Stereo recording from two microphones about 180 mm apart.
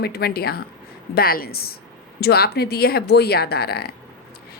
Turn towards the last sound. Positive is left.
turn(degrees=60)  # may be behind; listen again after turning